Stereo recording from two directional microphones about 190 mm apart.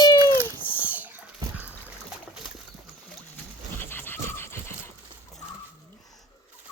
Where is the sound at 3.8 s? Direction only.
10° left (ahead or behind).